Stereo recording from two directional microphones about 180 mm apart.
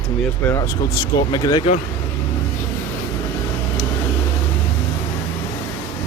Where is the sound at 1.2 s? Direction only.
25° left (ahead or behind).